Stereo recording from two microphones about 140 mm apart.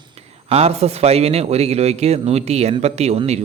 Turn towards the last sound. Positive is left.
turn(degrees=-50)  # may be behind; listen again after turning